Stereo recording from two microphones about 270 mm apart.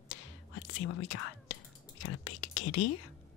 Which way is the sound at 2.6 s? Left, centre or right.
Left.